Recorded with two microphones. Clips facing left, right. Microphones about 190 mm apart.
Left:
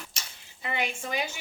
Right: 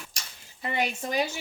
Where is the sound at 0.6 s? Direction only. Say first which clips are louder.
Right 3 dB; 40° right (ahead or behind).